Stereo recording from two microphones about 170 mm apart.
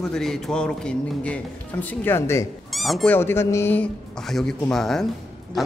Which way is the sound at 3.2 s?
15° left (ahead or behind).